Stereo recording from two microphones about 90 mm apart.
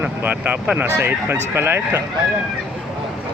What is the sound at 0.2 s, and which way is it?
Speech, 20° right (ahead or behind).